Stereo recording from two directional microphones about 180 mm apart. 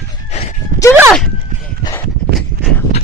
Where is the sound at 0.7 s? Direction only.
45° right (ahead or behind).